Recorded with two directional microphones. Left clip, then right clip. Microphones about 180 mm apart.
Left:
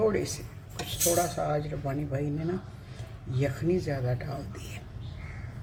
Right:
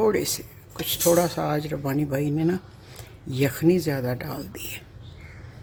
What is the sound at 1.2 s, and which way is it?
Speech, 60° right (ahead or behind).